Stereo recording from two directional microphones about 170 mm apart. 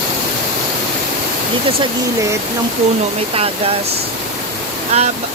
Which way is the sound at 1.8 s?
20° right (ahead or behind).